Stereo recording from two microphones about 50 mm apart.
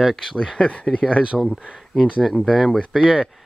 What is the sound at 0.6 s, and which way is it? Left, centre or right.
Speech, centre.